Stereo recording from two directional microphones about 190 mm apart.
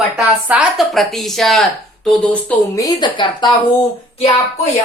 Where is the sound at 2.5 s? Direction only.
20° left (ahead or behind).